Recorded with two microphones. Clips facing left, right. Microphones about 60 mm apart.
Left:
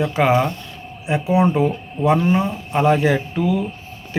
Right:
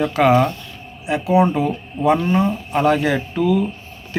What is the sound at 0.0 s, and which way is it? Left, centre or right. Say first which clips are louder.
Speech: right 2 dB; centre.